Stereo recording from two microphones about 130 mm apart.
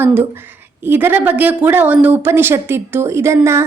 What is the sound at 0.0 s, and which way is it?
A woman's voice, 15° right (ahead or behind).